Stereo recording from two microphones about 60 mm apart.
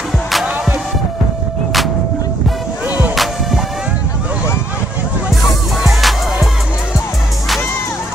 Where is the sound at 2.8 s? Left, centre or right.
Right.